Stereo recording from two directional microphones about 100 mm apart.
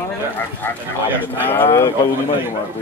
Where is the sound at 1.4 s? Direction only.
20° left (ahead or behind).